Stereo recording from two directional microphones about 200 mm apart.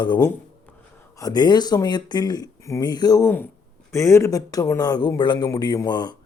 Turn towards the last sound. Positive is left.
turn(degrees=20)  # may be behind; listen again after turning